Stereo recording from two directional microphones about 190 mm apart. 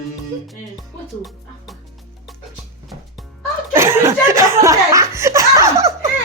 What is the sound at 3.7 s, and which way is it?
Laughter, 15° right (ahead or behind).